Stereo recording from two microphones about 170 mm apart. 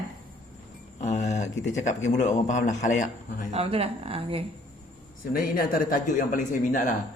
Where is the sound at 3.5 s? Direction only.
35° right (ahead or behind).